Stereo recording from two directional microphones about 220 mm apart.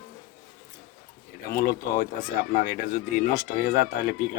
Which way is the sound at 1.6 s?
45° left (ahead or behind).